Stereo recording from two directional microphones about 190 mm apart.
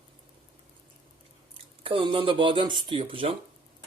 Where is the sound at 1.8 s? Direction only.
25° right (ahead or behind).